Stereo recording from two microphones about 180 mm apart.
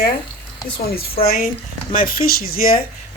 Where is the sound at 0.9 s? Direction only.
60° left (ahead or behind).